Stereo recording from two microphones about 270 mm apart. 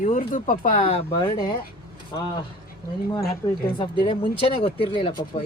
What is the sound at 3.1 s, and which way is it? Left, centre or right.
Speech, centre.